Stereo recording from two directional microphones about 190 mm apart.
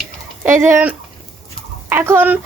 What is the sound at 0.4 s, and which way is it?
A woman's voice, 10° right (ahead or behind).